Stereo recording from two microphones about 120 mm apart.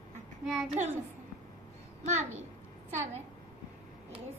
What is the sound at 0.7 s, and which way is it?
Speech, 65° right (ahead or behind).